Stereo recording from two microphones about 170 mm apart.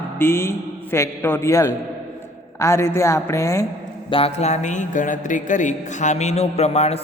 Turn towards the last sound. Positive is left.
turn(degrees=35)  # may be behind; listen again after turning